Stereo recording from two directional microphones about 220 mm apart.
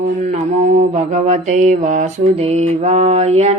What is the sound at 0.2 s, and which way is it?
Mantra, 30° right (ahead or behind).